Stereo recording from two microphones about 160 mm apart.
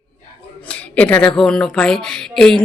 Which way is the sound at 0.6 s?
10° left (ahead or behind).